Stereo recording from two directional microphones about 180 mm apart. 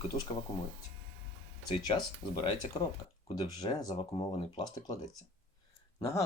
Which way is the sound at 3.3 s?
20° left (ahead or behind).